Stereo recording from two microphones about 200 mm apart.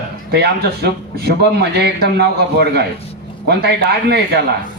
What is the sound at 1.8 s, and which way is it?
A man's voice, 55° right (ahead or behind).